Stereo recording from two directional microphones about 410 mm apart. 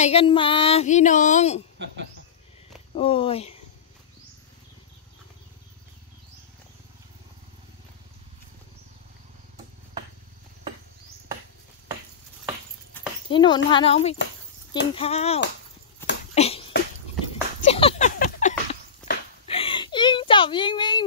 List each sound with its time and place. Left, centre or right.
0.0 s speech: centre
3.0 s speech: centre
13.3 s speech: centre
16.3 s a sound: centre